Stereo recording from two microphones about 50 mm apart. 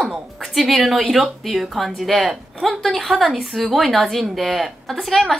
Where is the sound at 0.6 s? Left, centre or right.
Centre.